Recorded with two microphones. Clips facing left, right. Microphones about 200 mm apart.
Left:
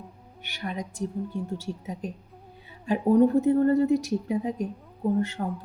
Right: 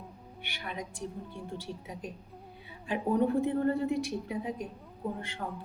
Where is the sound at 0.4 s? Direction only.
40° left (ahead or behind).